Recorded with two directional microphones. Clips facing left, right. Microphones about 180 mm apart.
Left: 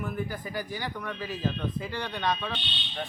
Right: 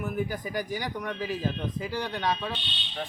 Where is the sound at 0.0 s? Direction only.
10° right (ahead or behind).